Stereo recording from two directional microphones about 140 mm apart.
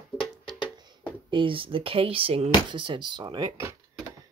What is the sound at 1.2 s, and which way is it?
Speech, 35° right (ahead or behind).